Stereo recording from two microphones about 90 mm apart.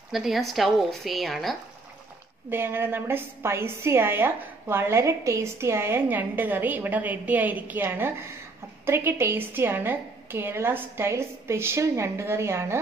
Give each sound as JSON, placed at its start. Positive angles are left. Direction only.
{"t": 0.1, "sound": "speech", "side_deg": -5}
{"t": 2.5, "sound": "a woman's voice", "side_deg": -25}